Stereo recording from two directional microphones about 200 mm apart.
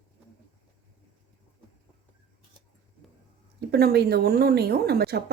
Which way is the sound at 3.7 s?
50° right (ahead or behind).